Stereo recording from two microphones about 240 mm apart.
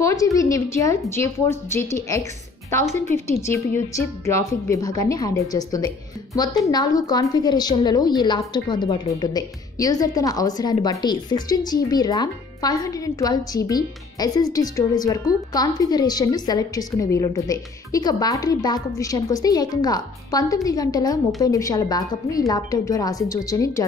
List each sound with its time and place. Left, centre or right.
0.0 s a woman's voice: centre
3.3 s a woman's voice: centre